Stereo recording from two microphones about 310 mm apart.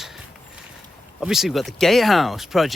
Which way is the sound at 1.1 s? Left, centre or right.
Centre.